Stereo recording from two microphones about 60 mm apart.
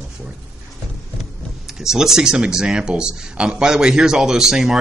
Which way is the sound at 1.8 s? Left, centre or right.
Centre.